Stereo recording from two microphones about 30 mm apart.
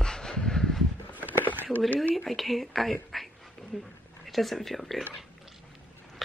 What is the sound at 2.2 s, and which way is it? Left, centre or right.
Speech, centre.